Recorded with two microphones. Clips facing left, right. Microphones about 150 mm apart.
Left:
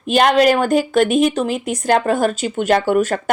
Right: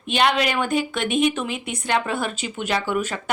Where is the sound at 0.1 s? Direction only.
45° left (ahead or behind).